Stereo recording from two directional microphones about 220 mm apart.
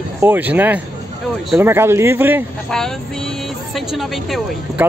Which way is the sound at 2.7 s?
5° left (ahead or behind).